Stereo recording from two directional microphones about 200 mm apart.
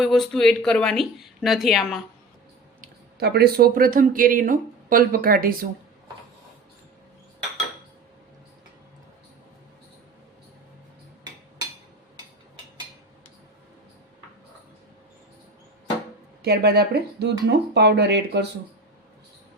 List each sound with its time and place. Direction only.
0.0 s a woman's voice: centre (ahead or behind)
2.8 s speech: 50° right (ahead or behind)
16.4 s speech: 55° right (ahead or behind)